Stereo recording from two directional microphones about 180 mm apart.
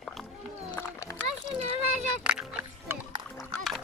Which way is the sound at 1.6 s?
40° right (ahead or behind).